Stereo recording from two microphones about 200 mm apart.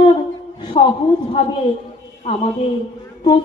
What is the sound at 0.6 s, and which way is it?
Speech, 25° left (ahead or behind).